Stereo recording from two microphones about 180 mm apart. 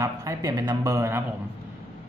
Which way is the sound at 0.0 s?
15° right (ahead or behind).